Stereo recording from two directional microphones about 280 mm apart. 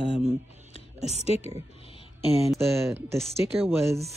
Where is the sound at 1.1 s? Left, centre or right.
Left.